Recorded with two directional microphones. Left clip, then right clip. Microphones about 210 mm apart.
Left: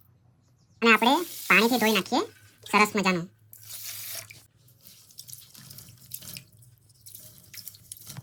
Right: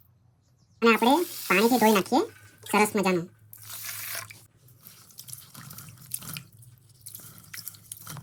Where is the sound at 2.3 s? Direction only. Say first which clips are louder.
Right 2 dB; 25° right (ahead or behind).